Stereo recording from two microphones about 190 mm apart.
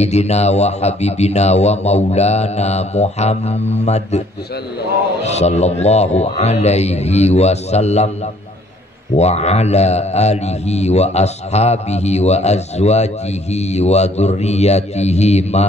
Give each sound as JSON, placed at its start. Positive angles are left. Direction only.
{"t": 0.0, "sound": "a man's voice", "side_deg": 35}
{"t": 5.2, "sound": "a man's voice", "side_deg": 35}
{"t": 9.1, "sound": "a man's voice", "side_deg": 35}